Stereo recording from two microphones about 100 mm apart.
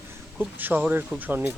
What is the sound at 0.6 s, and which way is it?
Speech, 20° right (ahead or behind).